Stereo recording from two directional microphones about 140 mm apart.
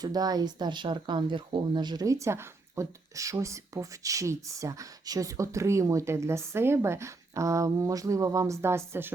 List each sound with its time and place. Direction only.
0.0 s speech: 25° right (ahead or behind)